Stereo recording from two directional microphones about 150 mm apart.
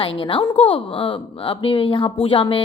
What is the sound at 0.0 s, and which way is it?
A woman's voice, 35° left (ahead or behind).